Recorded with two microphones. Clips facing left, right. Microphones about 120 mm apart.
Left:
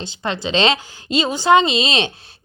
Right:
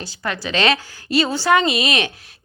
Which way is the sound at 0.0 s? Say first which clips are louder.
Left 2 dB; 20° left (ahead or behind).